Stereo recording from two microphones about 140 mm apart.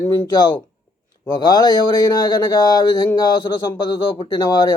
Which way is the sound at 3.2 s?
35° left (ahead or behind).